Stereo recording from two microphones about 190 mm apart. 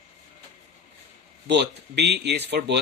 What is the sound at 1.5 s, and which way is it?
A man's voice, 60° right (ahead or behind).